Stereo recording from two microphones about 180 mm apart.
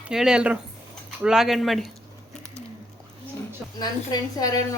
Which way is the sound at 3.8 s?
20° left (ahead or behind).